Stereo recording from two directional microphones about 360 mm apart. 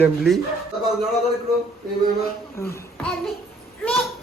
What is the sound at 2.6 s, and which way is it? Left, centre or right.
Speech, centre.